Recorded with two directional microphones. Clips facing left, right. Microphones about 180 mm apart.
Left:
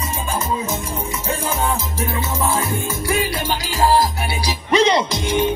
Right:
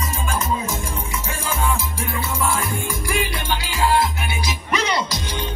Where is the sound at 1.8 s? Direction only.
20° left (ahead or behind).